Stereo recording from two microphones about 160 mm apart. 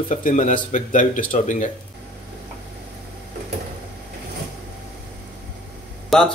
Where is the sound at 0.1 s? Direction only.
50° left (ahead or behind).